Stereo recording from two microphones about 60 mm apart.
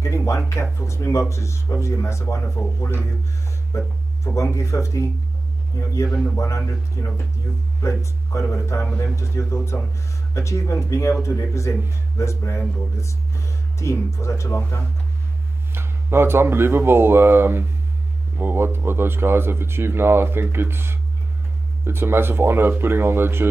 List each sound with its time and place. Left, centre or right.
0.0 s a sound: left
0.7 s speech: left
2.6 s speech: left
3.7 s speech: left
12.9 s music: left
13.9 s speech: left
15.7 s speech: right